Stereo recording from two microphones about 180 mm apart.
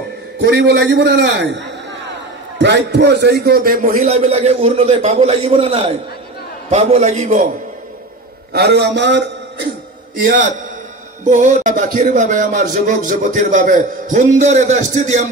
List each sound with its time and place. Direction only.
0.4 s a man's voice: 65° right (ahead or behind)
2.6 s speech: 70° right (ahead or behind); by 7.4 s 40° right (ahead or behind)
8.5 s a man's voice: 65° right (ahead or behind)
10.1 s speech: 50° right (ahead or behind)